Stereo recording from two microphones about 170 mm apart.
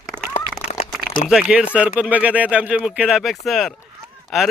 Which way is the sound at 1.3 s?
5° right (ahead or behind).